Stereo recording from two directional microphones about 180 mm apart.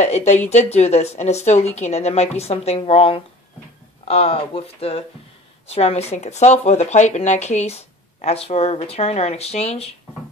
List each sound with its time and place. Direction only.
0.0 s speech: 40° left (ahead or behind)